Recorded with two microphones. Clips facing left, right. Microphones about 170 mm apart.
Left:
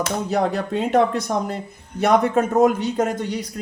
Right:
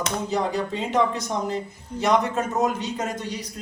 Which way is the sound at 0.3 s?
60° left (ahead or behind).